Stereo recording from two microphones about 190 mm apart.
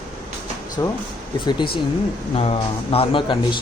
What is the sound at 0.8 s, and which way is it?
Speech, 15° left (ahead or behind).